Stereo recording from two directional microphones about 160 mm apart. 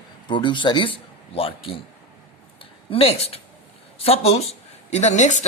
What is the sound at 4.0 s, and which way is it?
Speech, 40° left (ahead or behind).